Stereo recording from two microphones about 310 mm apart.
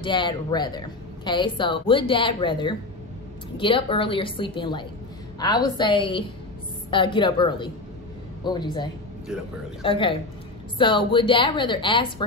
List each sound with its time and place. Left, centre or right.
0.0 s speech: centre